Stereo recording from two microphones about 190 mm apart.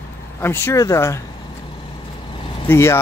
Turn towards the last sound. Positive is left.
turn(degrees=15)  # may be behind; listen again after turning